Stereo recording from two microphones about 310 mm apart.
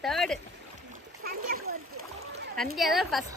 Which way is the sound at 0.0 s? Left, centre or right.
Centre.